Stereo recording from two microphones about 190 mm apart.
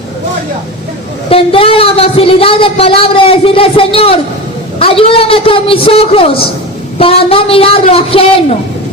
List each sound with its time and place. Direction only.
1.3 s a woman's voice: 30° left (ahead or behind)